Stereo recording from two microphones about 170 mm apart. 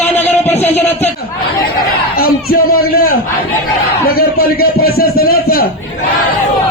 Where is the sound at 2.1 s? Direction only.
65° left (ahead or behind).